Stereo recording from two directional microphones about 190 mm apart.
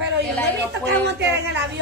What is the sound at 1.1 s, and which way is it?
Speech, 65° right (ahead or behind).